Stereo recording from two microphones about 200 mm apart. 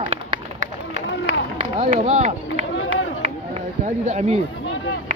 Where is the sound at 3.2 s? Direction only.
35° right (ahead or behind).